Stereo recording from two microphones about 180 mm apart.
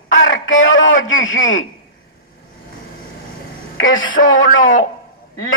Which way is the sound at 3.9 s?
50° left (ahead or behind).